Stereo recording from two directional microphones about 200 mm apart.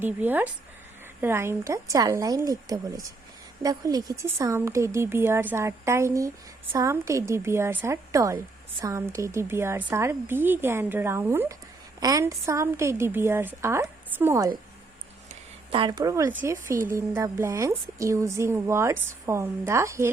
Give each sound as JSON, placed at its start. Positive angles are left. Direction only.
{"t": 0.0, "sound": "speech", "side_deg": -10}
{"t": 15.7, "sound": "speech", "side_deg": -25}